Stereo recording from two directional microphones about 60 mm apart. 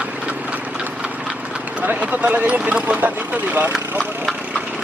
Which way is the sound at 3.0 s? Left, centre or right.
Right.